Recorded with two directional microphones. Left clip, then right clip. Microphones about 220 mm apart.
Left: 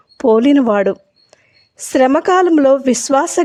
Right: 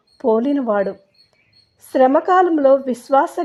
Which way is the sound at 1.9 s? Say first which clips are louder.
Left 2 dB; 30° left (ahead or behind).